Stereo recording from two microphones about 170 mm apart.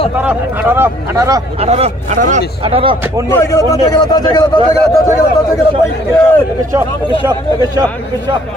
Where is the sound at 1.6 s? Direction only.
40° right (ahead or behind).